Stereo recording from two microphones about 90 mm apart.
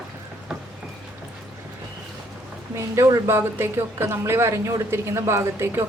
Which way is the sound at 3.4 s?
25° right (ahead or behind).